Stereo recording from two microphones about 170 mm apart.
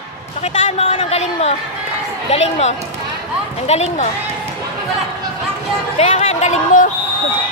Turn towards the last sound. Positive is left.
turn(degrees=45)  # may be behind; listen again after turning